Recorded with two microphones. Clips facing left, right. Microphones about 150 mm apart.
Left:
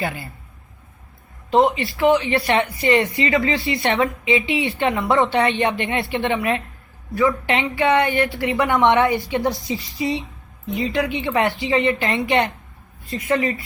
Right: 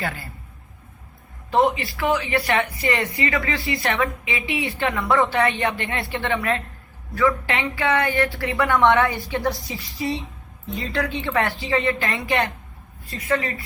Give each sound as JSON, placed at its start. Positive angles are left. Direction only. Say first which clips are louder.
{"t": 0.0, "sound": "a woman's voice", "louder": "left 3 dB", "side_deg": 20}
{"t": 1.5, "sound": "a woman's voice", "louder": "left 3 dB", "side_deg": 20}